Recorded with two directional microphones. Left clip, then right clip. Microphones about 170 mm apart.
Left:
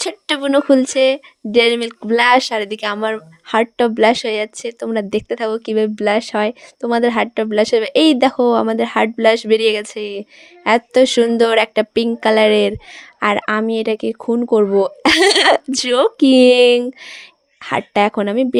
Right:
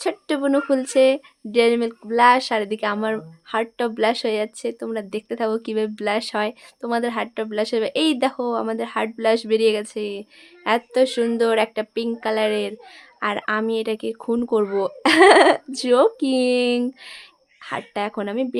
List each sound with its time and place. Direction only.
0.3 s speech: 45° left (ahead or behind)
15.0 s speech: 60° left (ahead or behind)
16.8 s speech: 40° left (ahead or behind)